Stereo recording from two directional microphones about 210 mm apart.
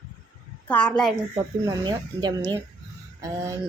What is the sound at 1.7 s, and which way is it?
Speech, 20° right (ahead or behind).